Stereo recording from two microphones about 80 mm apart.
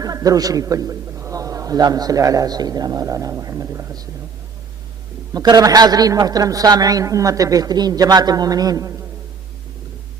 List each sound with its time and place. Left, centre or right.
0.0 s a man's voice: right
5.3 s a man's voice: right